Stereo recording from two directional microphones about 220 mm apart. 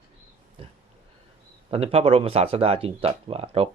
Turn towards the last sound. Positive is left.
turn(degrees=-25)  # may be behind; listen again after turning